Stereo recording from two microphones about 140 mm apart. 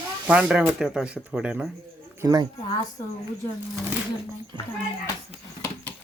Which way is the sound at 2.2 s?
25° right (ahead or behind).